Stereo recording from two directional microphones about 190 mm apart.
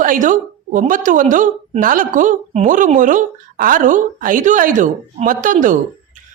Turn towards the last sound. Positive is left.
turn(degrees=-40)  # may be behind; listen again after turning